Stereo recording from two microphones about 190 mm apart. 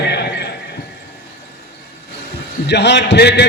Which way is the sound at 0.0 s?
60° left (ahead or behind).